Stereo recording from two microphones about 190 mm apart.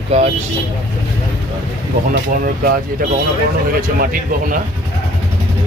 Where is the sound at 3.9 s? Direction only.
50° right (ahead or behind).